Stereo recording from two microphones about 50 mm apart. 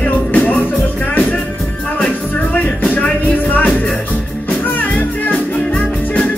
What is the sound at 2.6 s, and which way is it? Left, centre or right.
Music, left.